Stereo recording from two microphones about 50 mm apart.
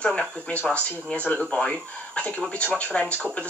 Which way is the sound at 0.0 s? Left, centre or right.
Centre.